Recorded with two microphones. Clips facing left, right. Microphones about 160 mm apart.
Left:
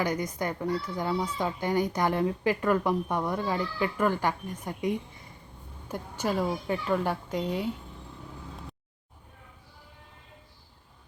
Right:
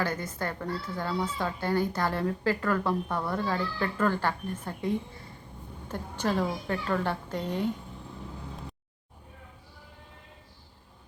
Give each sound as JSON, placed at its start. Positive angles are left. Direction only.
{"t": 0.0, "sound": "speech", "side_deg": 15}